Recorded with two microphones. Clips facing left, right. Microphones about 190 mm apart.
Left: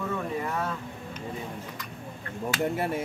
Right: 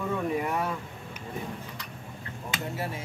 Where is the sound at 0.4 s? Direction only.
15° right (ahead or behind).